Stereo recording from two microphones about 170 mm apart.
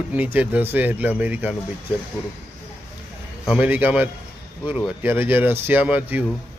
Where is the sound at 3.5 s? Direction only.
10° right (ahead or behind).